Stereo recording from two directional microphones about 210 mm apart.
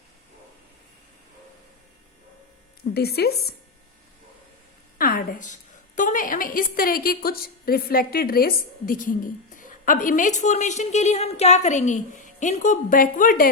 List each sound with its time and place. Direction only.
2.9 s speech: 50° left (ahead or behind)
4.9 s a sound: 45° left (ahead or behind)
6.0 s a woman's voice: 40° left (ahead or behind)